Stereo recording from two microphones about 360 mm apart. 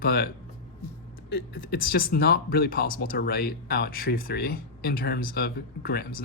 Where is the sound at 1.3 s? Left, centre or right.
Left.